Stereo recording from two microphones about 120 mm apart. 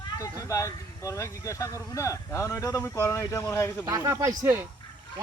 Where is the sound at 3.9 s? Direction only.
30° right (ahead or behind).